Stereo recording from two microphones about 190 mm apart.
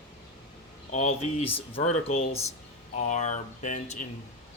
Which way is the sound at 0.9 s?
35° left (ahead or behind).